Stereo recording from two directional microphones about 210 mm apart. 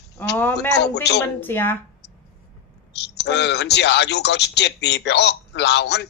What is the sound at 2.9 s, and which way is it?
Speech, 55° left (ahead or behind).